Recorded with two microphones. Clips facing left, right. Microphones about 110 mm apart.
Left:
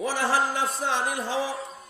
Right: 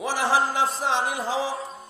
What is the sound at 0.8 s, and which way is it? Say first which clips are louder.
Speech: right 2 dB; 25° right (ahead or behind).